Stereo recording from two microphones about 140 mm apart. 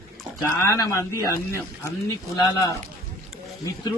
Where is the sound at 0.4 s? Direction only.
20° left (ahead or behind).